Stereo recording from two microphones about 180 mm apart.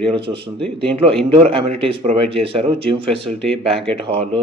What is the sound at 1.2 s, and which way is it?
Speech, 30° right (ahead or behind).